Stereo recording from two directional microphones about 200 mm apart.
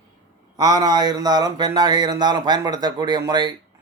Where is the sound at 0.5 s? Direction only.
20° right (ahead or behind).